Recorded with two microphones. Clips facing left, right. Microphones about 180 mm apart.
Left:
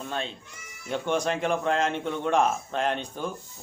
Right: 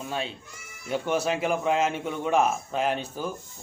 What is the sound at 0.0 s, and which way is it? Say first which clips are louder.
A man's voice: right 1 dB; 5° right (ahead or behind).